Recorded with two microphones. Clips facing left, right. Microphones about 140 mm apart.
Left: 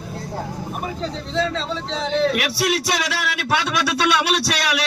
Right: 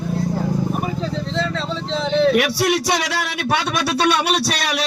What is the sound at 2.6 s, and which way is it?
Speech, 55° right (ahead or behind).